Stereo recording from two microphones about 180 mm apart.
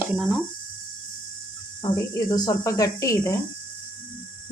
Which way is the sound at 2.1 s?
20° left (ahead or behind).